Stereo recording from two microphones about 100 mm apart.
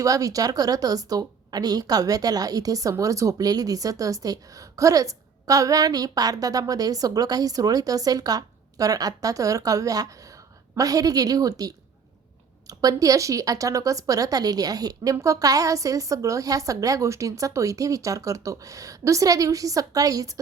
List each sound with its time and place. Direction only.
0.0 s speech: 35° right (ahead or behind)